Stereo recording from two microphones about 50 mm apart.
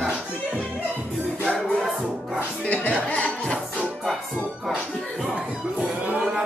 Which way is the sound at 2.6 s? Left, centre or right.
Left.